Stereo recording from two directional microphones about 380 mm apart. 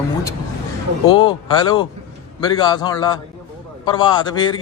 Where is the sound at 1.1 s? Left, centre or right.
Centre.